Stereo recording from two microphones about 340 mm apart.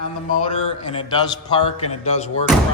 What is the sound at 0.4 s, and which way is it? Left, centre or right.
Speech, centre.